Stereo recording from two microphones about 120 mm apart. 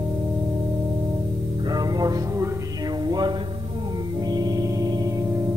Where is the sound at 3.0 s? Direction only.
35° right (ahead or behind).